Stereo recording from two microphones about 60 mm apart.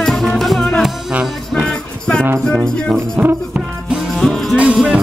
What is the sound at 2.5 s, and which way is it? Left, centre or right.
Music, centre.